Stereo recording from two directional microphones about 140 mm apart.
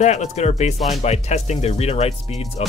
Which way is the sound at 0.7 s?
Centre (ahead or behind).